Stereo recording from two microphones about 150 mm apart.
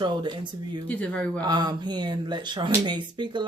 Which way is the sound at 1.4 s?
30° right (ahead or behind).